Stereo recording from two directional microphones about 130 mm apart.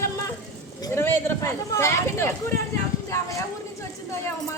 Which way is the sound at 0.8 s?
20° left (ahead or behind).